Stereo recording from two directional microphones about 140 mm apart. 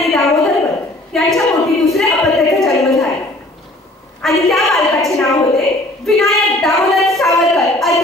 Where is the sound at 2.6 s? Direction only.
Centre (ahead or behind).